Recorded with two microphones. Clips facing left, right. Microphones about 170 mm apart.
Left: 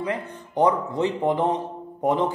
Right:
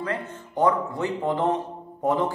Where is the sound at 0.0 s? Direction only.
15° left (ahead or behind).